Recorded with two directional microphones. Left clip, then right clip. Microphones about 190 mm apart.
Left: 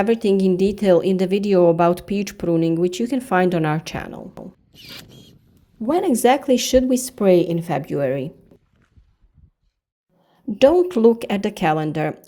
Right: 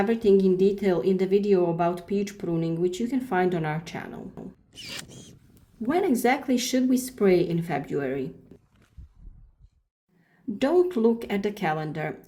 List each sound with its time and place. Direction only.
0.0 s a woman's voice: 45° left (ahead or behind)
4.4 s mechanisms: centre (ahead or behind)
5.8 s a woman's voice: 35° left (ahead or behind)
10.6 s a woman's voice: 40° left (ahead or behind)